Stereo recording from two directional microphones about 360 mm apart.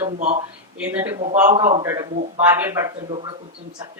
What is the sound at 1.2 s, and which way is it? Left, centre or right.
Speech, centre.